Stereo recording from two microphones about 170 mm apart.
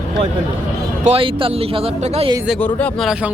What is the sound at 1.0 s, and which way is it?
Speech, 30° right (ahead or behind).